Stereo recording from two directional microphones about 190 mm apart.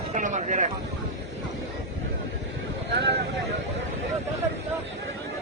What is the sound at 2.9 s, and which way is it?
Vehicle, 60° right (ahead or behind).